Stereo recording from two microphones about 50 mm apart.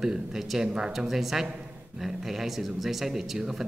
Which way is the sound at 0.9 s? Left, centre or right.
Centre.